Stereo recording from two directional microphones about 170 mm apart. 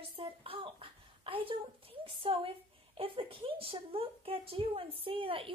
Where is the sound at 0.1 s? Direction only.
35° right (ahead or behind).